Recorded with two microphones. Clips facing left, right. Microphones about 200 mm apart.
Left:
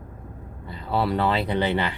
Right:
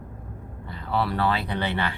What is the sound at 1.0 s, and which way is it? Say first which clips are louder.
Speech: left 3 dB; 25° left (ahead or behind).